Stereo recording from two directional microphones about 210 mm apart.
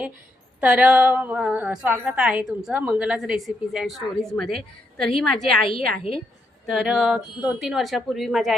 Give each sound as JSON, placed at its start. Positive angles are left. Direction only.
{"t": 0.6, "sound": "a woman's voice", "side_deg": -5}
{"t": 6.0, "sound": "a woman's voice", "side_deg": 25}
{"t": 6.7, "sound": "a woman's voice", "side_deg": 0}